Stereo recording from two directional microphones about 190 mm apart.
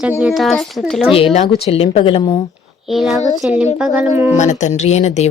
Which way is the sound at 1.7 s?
30° left (ahead or behind).